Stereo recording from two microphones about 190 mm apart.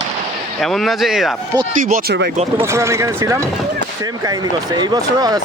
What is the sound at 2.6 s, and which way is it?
Speech, 15° right (ahead or behind).